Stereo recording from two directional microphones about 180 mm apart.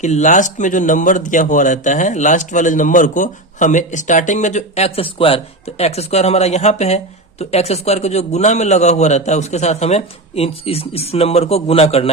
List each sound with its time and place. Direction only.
0.0 s a man's voice: 40° left (ahead or behind)